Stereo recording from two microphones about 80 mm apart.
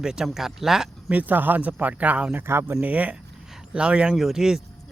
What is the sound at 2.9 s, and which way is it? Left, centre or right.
Speech, centre.